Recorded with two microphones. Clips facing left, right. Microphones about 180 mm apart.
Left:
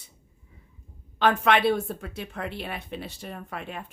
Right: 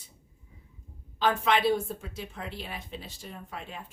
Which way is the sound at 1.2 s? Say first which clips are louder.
Left 4 dB; 65° left (ahead or behind).